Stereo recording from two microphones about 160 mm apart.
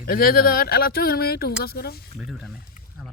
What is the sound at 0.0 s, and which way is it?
Speech, 70° left (ahead or behind).